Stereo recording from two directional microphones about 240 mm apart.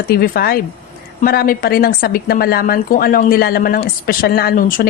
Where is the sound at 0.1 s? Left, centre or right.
Left.